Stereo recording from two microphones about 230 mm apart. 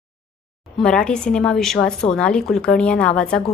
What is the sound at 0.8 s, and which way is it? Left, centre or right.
A woman's voice, centre.